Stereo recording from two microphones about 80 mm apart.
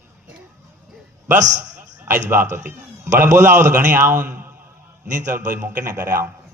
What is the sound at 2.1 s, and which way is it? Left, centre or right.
A man's voice, right.